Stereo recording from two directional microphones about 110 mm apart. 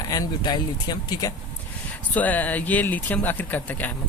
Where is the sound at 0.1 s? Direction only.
40° left (ahead or behind).